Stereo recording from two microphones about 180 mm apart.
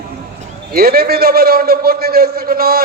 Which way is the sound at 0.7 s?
60° right (ahead or behind).